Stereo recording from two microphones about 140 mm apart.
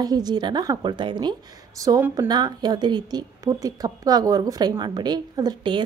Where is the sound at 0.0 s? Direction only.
30° right (ahead or behind).